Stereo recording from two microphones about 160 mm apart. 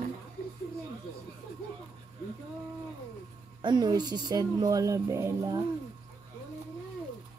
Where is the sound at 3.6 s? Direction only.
25° right (ahead or behind).